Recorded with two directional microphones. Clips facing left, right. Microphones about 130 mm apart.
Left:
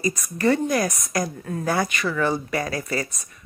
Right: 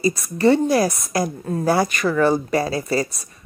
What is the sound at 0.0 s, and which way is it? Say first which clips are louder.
A woman's voice: right 5 dB; 30° right (ahead or behind).